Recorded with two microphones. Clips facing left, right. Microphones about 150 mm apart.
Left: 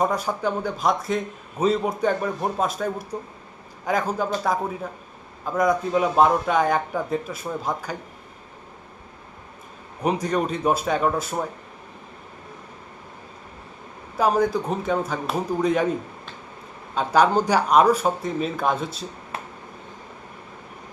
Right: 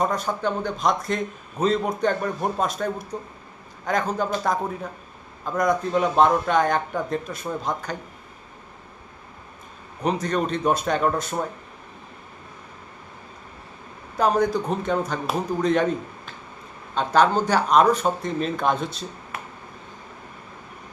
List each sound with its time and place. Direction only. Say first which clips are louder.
0.0 s a man's voice: left 1 dB; 10° left (ahead or behind)
10.0 s a man's voice: left 1 dB; 10° left (ahead or behind)
14.2 s a man's voice: even; 5° left (ahead or behind)
19.3 s finger snapping: left 3 dB; 30° left (ahead or behind)